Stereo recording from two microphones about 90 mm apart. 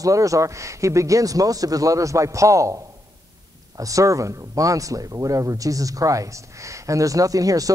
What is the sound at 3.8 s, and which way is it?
A man's voice, 40° right (ahead or behind).